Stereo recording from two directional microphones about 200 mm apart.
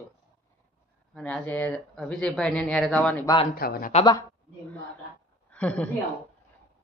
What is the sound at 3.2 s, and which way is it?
Speech, 20° left (ahead or behind).